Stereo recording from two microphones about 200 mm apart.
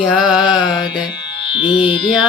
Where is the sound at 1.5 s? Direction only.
25° left (ahead or behind).